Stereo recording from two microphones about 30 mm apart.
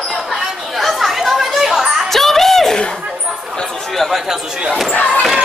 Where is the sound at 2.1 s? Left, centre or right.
Centre.